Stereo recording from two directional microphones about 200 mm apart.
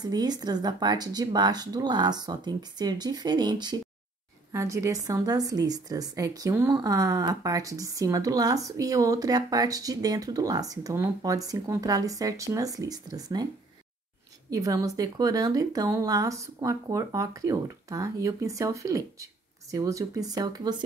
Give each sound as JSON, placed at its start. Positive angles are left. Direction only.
{"t": 0.0, "sound": "a woman's voice", "side_deg": -20}
{"t": 14.5, "sound": "a woman's voice", "side_deg": -15}